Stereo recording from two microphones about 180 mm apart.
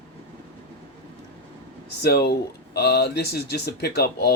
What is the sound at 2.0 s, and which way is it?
Speech, 65° left (ahead or behind).